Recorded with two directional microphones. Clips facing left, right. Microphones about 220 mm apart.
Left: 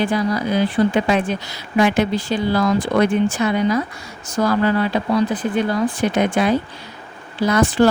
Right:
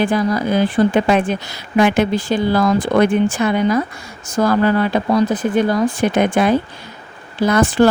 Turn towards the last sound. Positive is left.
turn(degrees=-50)  # may be behind; listen again after turning